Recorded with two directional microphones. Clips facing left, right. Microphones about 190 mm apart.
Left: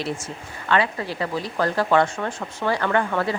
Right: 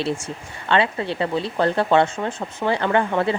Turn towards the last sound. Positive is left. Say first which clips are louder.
# right 2 dB
turn(degrees=-20)  # may be behind; listen again after turning